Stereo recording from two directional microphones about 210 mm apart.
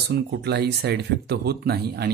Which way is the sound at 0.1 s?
50° right (ahead or behind).